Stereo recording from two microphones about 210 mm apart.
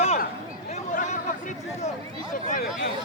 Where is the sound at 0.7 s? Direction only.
35° left (ahead or behind).